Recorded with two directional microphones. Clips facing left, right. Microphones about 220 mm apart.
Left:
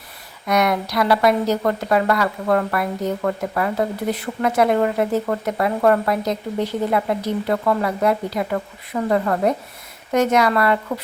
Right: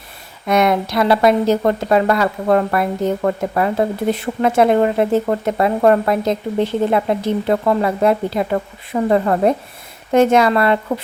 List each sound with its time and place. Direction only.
0.4 s speech: 25° right (ahead or behind)